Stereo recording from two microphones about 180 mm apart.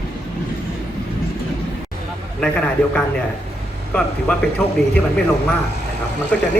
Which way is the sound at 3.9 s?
5° left (ahead or behind).